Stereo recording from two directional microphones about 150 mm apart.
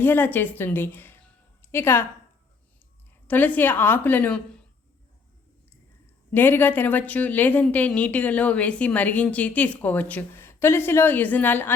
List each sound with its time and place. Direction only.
0.0 s a woman's voice: 15° left (ahead or behind)
3.2 s a woman's voice: 10° left (ahead or behind)
6.3 s a woman's voice: 15° left (ahead or behind)